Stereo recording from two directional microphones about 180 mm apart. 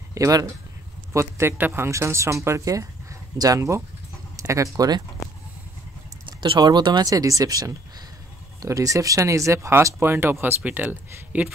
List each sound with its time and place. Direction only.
0.1 s speech: 20° right (ahead or behind)
6.2 s speech: 25° right (ahead or behind); by 11.5 s 10° right (ahead or behind)